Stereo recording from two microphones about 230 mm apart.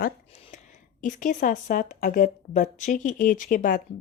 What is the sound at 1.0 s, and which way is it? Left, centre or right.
A woman's voice, left.